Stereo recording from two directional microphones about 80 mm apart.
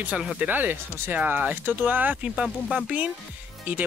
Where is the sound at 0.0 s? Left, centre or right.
Centre.